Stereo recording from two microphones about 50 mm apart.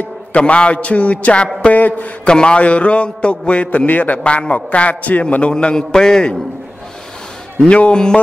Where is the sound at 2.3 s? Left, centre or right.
Centre.